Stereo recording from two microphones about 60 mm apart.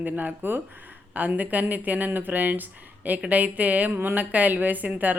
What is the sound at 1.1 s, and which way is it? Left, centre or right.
Speech, right.